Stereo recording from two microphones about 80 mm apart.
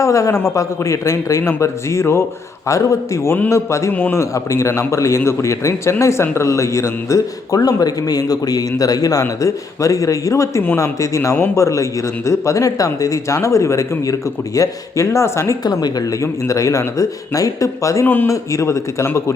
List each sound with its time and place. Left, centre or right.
0.0 s speech: left
3.9 s a man's voice: left
4.2 s a man's voice: left
15.6 s speech: left
16.2 s a man's voice: left
18.0 s a man's voice: left
18.3 s speech: left